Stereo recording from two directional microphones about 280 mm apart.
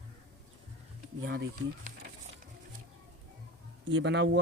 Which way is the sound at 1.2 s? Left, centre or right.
Right.